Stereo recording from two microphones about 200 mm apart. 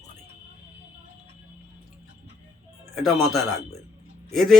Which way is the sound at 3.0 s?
Centre (ahead or behind).